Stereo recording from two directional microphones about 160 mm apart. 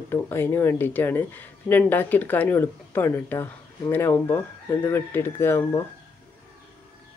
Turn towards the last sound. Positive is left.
turn(degrees=15)  # may be behind; listen again after turning